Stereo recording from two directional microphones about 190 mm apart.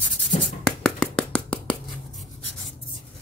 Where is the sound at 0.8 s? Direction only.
5° left (ahead or behind).